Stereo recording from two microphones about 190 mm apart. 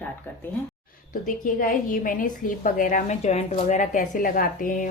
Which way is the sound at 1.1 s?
45° left (ahead or behind).